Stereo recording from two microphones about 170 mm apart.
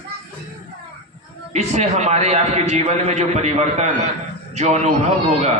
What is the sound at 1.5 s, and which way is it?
A man's voice, 40° right (ahead or behind).